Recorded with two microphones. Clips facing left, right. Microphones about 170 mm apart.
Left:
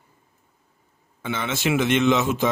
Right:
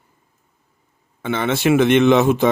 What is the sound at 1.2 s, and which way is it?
Speech, 55° right (ahead or behind).